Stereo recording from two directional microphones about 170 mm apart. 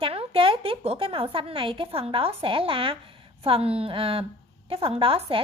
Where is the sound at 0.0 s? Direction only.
35° right (ahead or behind).